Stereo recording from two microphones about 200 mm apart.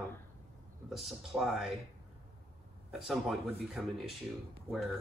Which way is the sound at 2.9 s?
Centre (ahead or behind).